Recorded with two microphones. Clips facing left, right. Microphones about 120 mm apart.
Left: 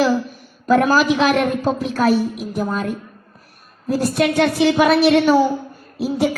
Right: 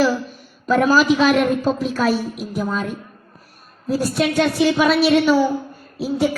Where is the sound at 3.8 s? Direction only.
60° left (ahead or behind).